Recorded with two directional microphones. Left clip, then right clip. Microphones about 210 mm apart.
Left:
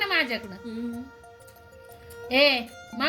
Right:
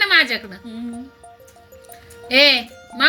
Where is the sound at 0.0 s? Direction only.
20° right (ahead or behind).